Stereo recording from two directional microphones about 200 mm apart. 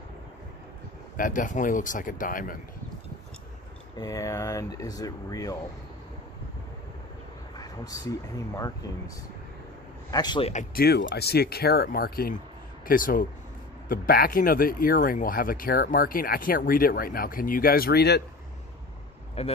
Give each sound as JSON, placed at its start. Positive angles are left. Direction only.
{"t": 1.1, "sound": "speech", "side_deg": 40}
{"t": 3.9, "sound": "speech", "side_deg": 20}
{"t": 7.5, "sound": "a sound", "side_deg": 20}
{"t": 8.5, "sound": "speech", "side_deg": 15}
{"t": 10.1, "sound": "a man's voice", "side_deg": 20}
{"t": 10.5, "sound": "speech", "side_deg": 40}
{"t": 19.4, "sound": "speech", "side_deg": 30}